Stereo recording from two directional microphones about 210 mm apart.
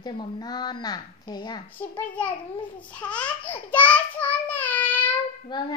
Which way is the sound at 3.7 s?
5° left (ahead or behind).